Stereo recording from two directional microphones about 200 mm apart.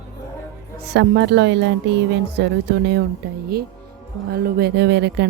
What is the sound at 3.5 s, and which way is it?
Speech, 50° right (ahead or behind).